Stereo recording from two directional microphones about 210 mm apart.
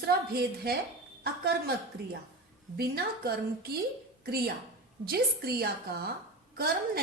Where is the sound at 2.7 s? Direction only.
50° right (ahead or behind).